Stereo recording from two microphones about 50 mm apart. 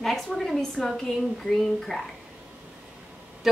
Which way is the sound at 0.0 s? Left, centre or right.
Centre.